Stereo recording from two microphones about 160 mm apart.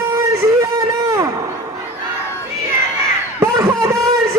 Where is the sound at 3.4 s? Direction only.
20° right (ahead or behind).